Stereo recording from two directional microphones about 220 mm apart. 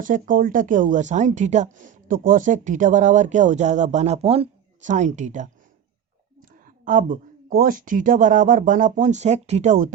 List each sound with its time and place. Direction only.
0.0 s speech: 35° right (ahead or behind)
6.5 s speech: 35° right (ahead or behind)